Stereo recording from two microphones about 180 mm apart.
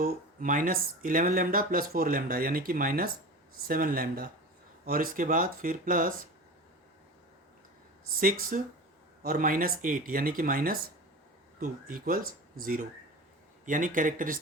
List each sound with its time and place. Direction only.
0.0 s speech: 50° right (ahead or behind)
8.2 s speech: 50° right (ahead or behind)